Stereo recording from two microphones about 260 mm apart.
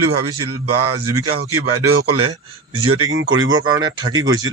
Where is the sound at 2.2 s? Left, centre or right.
Right.